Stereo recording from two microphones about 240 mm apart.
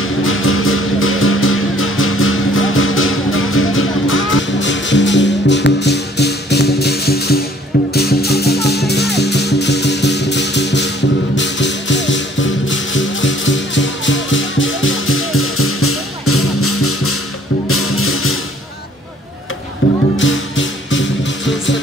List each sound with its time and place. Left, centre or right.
0.0 s music: left
19.8 s music: left